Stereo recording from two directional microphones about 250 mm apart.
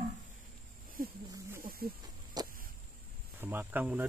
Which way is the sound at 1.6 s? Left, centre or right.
Right.